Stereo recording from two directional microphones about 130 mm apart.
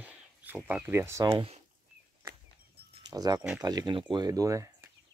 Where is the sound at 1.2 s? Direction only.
40° right (ahead or behind).